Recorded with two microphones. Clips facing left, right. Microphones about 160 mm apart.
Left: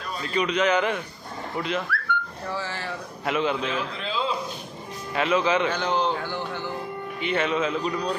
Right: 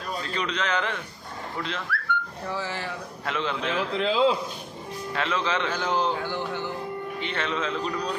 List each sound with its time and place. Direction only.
0.3 s a man's voice: 10° left (ahead or behind)
1.9 s dog: 75° left (ahead or behind)
2.5 s speech: 15° right (ahead or behind)
3.3 s a man's voice: 10° left (ahead or behind)
3.9 s a man's voice: 80° right
5.1 s a man's voice: 10° left (ahead or behind)
5.7 s speech: centre (ahead or behind)
7.2 s a man's voice: 10° left (ahead or behind)